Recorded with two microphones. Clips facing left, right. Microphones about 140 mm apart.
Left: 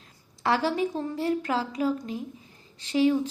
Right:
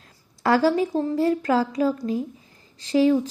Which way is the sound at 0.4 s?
40° right (ahead or behind).